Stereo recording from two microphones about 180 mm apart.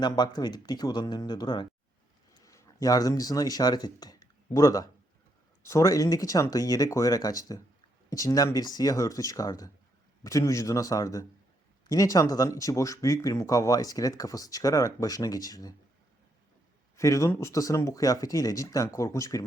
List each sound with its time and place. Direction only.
0.0 s speech: 25° left (ahead or behind)
17.0 s speech: 15° left (ahead or behind)